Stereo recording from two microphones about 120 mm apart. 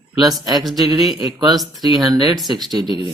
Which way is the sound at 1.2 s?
35° right (ahead or behind).